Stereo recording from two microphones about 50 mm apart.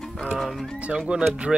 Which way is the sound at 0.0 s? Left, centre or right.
Centre.